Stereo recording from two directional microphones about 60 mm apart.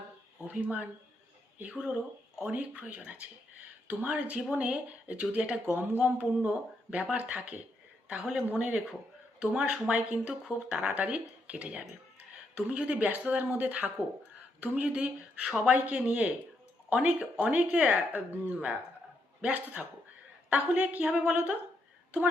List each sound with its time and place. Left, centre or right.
0.6 s a woman's voice: right
5.7 s a sound: right
6.9 s a woman's voice: right